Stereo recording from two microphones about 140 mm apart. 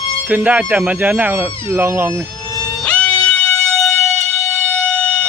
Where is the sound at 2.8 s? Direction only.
10° left (ahead or behind).